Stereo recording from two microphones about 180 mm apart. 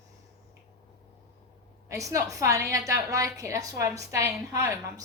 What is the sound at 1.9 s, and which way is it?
A woman's voice, 20° right (ahead or behind).